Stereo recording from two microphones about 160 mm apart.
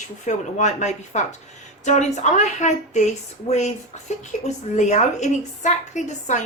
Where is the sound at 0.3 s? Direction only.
45° left (ahead or behind).